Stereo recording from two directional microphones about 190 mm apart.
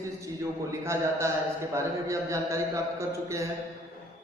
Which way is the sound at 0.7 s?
15° right (ahead or behind).